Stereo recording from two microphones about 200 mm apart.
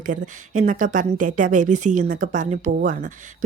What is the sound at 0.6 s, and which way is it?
Speech, 40° right (ahead or behind).